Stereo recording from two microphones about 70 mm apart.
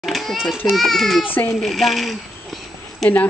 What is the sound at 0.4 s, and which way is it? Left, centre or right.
A child's voice, centre.